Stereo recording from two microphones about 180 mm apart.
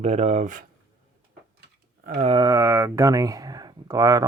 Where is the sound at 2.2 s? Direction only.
30° right (ahead or behind).